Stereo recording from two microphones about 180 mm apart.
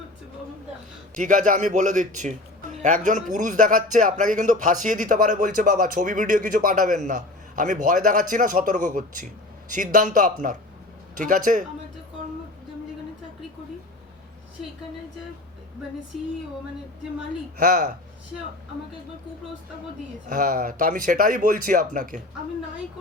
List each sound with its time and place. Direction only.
1.1 s speech: 45° right (ahead or behind)
20.3 s speech: 50° right (ahead or behind)